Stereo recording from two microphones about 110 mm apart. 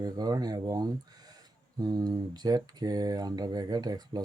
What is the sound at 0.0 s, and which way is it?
Speech, 35° right (ahead or behind).